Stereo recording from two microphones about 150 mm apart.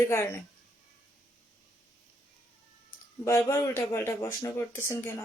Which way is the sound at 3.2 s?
15° left (ahead or behind).